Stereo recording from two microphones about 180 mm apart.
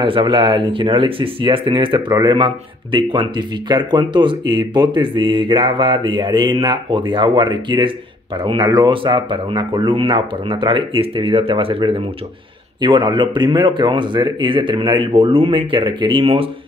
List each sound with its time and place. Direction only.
0.0 s speech: 25° right (ahead or behind)